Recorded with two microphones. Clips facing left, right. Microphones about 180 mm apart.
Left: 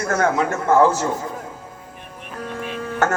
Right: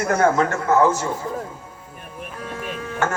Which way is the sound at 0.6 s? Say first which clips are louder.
Left 3 dB; 30° left (ahead or behind).